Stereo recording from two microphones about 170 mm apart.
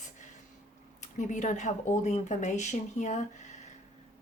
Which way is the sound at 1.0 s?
45° left (ahead or behind).